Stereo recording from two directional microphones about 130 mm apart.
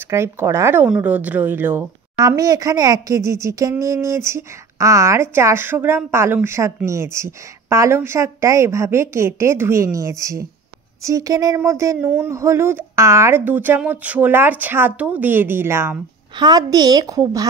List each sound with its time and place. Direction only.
0.0 s speech: 20° right (ahead or behind)
2.1 s speech: 25° right (ahead or behind)
16.3 s a woman's voice: 30° right (ahead or behind)